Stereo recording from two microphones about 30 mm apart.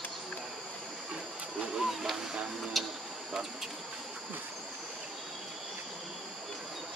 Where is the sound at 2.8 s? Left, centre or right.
Centre.